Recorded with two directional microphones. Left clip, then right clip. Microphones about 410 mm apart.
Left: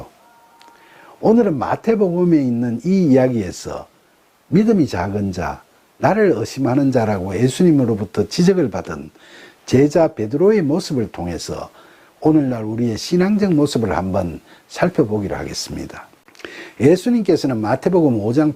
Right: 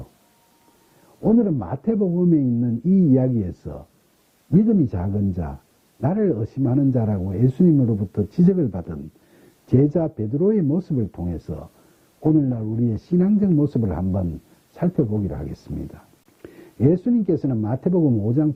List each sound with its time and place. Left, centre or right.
1.4 s speech: centre
4.9 s speech: centre
18.0 s speech: centre
18.3 s speech: centre